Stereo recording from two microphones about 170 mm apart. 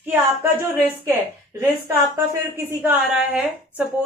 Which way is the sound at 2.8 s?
5° right (ahead or behind).